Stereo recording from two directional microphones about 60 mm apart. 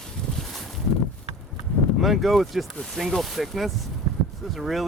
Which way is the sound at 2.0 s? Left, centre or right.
Centre.